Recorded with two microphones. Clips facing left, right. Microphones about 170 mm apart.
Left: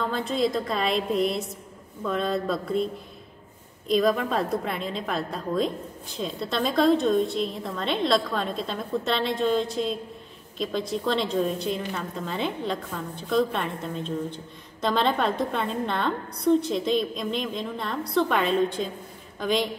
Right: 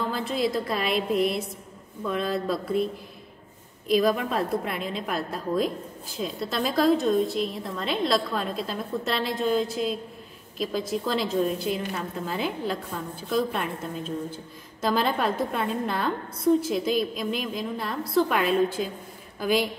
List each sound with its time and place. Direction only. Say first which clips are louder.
0.1 s a woman's voice: left 1 dB; centre (ahead or behind)